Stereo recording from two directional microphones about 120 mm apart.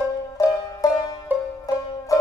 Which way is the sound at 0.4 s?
30° left (ahead or behind).